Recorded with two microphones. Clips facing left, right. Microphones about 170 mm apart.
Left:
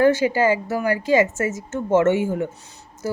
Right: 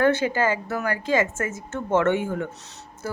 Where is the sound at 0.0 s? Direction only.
55° right (ahead or behind).